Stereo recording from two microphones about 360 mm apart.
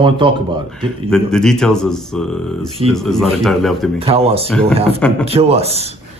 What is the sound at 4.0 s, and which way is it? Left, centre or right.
Speech, centre.